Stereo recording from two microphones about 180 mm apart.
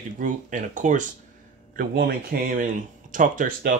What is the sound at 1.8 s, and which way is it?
Speech, 55° right (ahead or behind).